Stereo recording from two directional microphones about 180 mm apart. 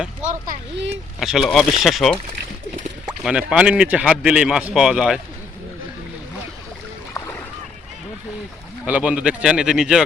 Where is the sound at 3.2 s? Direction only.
5° right (ahead or behind).